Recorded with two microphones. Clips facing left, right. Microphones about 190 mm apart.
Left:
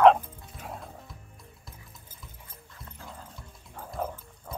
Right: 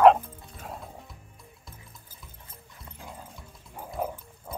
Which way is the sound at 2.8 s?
15° right (ahead or behind).